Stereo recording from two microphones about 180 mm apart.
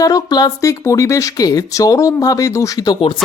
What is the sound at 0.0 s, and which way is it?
Speech, 20° left (ahead or behind).